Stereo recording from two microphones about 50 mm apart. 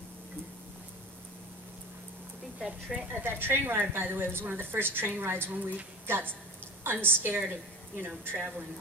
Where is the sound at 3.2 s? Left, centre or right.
Right.